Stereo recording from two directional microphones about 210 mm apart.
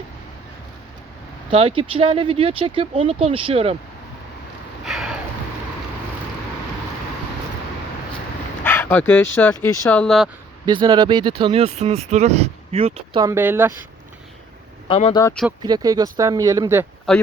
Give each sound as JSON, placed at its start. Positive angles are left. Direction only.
{"t": 1.5, "sound": "speech", "side_deg": -25}
{"t": 4.9, "sound": "a sound", "side_deg": 0}
{"t": 8.6, "sound": "speech", "side_deg": 10}
{"t": 10.7, "sound": "speech", "side_deg": -20}
{"t": 13.2, "sound": "speech", "side_deg": -10}
{"t": 14.8, "sound": "speech", "side_deg": 25}
{"t": 15.2, "sound": "speech", "side_deg": 5}
{"t": 15.6, "sound": "speech", "side_deg": -20}
{"t": 17.1, "sound": "speech", "side_deg": 5}